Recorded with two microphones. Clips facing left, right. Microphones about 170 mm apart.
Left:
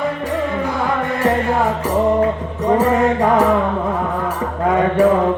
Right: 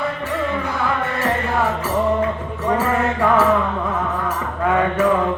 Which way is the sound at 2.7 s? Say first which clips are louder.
Left 5 dB; 15° left (ahead or behind).